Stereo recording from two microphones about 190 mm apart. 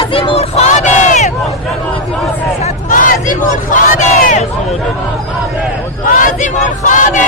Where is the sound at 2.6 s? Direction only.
45° left (ahead or behind).